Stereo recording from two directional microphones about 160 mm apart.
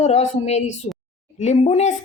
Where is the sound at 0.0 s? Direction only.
45° left (ahead or behind).